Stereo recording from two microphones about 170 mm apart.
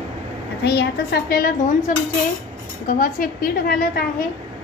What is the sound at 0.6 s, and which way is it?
A woman's voice, 80° left.